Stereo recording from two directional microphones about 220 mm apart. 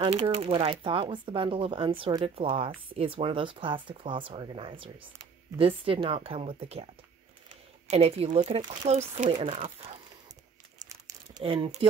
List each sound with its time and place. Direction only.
0.0 s speech: 25° right (ahead or behind)
7.9 s speech: 30° right (ahead or behind)
10.8 s crumpling: 15° right (ahead or behind)